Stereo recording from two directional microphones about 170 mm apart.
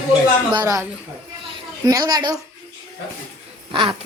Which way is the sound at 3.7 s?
30° right (ahead or behind).